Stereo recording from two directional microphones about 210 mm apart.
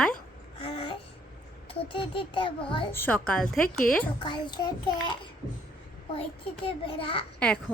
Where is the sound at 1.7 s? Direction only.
25° left (ahead or behind).